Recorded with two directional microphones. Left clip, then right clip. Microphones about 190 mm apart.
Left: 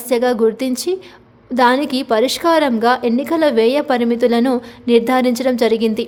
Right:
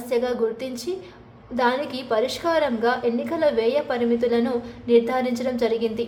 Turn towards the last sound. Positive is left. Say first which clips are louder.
# left 7 dB
turn(degrees=50)  # may be behind; listen again after turning